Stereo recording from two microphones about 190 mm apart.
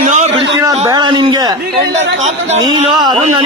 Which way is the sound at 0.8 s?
20° right (ahead or behind).